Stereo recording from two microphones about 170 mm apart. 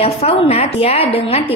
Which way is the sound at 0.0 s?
35° left (ahead or behind).